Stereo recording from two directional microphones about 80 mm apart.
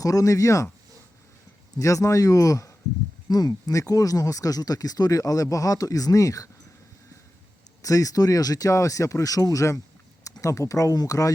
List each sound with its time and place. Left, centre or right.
0.0 s speech: left
1.8 s speech: left
3.2 s speech: left
7.8 s speech: left